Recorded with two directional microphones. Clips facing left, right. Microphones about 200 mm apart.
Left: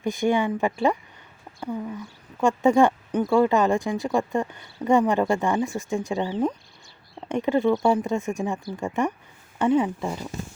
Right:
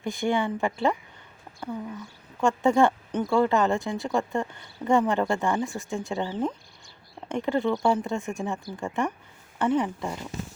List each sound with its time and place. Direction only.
0.0 s speech: 20° left (ahead or behind)
2.4 s speech: 20° left (ahead or behind)